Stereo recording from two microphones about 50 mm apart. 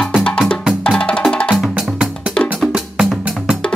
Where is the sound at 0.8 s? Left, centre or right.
Centre.